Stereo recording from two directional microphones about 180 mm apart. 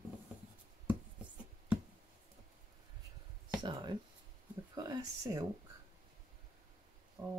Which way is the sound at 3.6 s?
25° right (ahead or behind).